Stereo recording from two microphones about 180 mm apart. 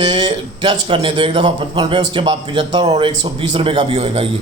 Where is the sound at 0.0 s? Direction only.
25° right (ahead or behind).